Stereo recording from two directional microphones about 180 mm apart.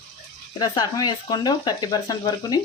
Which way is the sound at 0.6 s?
25° left (ahead or behind).